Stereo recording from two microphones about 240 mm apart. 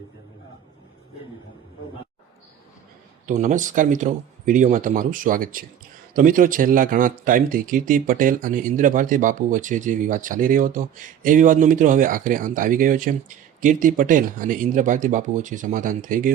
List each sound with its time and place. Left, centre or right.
3.2 s speech: right